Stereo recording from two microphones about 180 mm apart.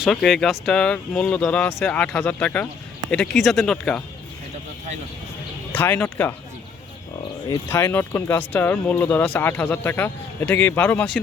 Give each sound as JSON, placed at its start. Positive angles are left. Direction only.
{"t": 0.0, "sound": "speech", "side_deg": 0}
{"t": 5.7, "sound": "speech", "side_deg": 10}
{"t": 7.5, "sound": "speech", "side_deg": 15}